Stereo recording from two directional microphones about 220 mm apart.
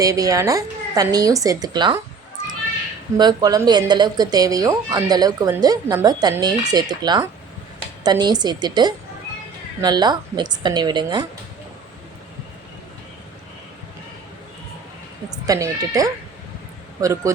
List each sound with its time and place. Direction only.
0.0 s speech: 15° right (ahead or behind)
3.2 s speech: 20° right (ahead or behind)
15.4 s speech: 15° right (ahead or behind)